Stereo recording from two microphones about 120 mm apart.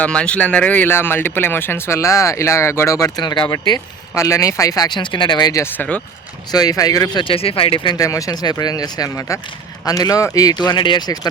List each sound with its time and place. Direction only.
0.0 s speech: 10° left (ahead or behind); by 5.6 s 30° left (ahead or behind)
5.7 s speech: 15° left (ahead or behind)
6.5 s speech: 35° left (ahead or behind); by 7.9 s 50° left (ahead or behind)
7.9 s speech: 30° left (ahead or behind)